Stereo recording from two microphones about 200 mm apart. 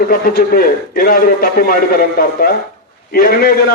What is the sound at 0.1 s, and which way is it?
A man's voice, 45° left (ahead or behind).